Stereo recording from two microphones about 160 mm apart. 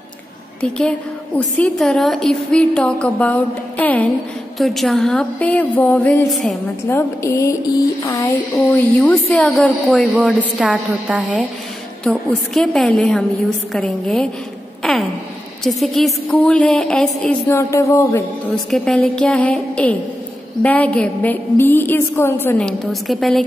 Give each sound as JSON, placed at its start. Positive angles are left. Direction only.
{"t": 0.6, "sound": "a woman's voice", "side_deg": 5}
{"t": 6.9, "sound": "a woman's voice", "side_deg": 15}
{"t": 9.0, "sound": "a woman's voice", "side_deg": 5}
{"t": 14.8, "sound": "a sound", "side_deg": 0}
{"t": 15.6, "sound": "a woman's voice", "side_deg": 0}
{"t": 17.5, "sound": "a woman's voice", "side_deg": 20}
{"t": 18.5, "sound": "a woman's voice", "side_deg": 5}